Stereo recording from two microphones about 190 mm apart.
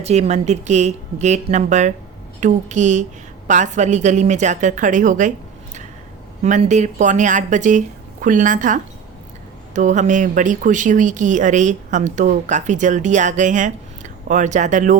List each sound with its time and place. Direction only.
0.0 s speech: 35° right (ahead or behind)
6.4 s speech: 40° right (ahead or behind)